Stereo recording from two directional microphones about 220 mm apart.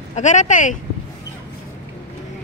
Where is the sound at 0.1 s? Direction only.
35° left (ahead or behind).